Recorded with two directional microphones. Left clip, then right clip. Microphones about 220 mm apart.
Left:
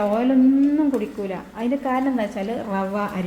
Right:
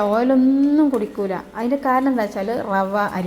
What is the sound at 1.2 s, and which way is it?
A woman's voice, 15° right (ahead or behind).